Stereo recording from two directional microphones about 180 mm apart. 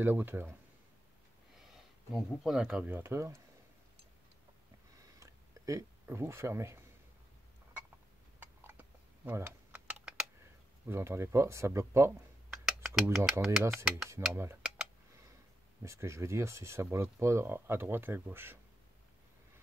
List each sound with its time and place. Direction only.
0.0 s speech: 10° right (ahead or behind)
2.1 s speech: centre (ahead or behind)
5.2 s a sound: 15° right (ahead or behind)
8.6 s typing: 10° right (ahead or behind)
10.9 s speech: 15° right (ahead or behind)
12.6 s speech: centre (ahead or behind)
14.3 s speech: 15° right (ahead or behind)
15.8 s speech: 15° right (ahead or behind)